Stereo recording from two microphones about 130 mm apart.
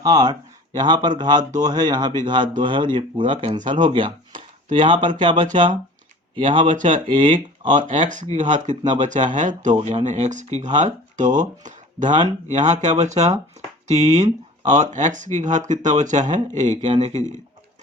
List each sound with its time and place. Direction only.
0.0 s speech: 30° right (ahead or behind)
1.4 s speech: 80° right
1.6 s speech: 30° right (ahead or behind)
7.8 s speech: 75° right (ahead or behind)
12.2 s speech: 65° right (ahead or behind)